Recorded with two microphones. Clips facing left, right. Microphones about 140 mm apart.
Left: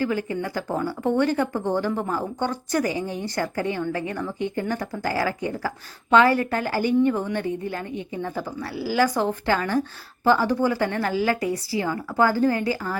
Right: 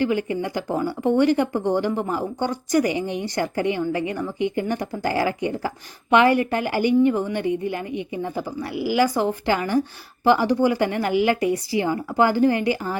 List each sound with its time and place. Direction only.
0.0 s speech: 20° right (ahead or behind)